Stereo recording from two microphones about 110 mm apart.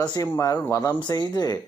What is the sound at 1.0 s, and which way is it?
Speech, 40° left (ahead or behind).